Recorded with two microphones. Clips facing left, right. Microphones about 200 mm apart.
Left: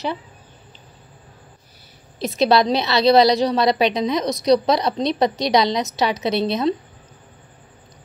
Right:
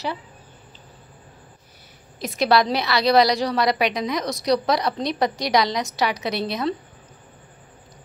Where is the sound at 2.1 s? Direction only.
25° left (ahead or behind).